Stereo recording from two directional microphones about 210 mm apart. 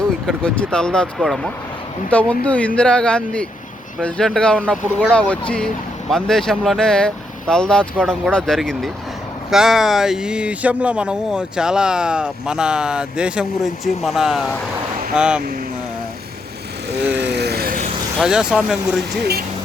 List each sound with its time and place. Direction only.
0.3 s speech: 5° left (ahead or behind)
17.2 s vehicle: 55° right (ahead or behind)
18.2 s speech: 5° right (ahead or behind)